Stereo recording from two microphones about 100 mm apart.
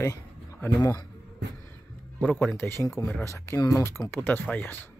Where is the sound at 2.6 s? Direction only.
25° left (ahead or behind).